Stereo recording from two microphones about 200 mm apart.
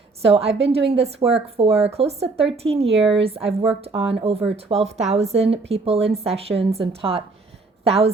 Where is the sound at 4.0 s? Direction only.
30° right (ahead or behind).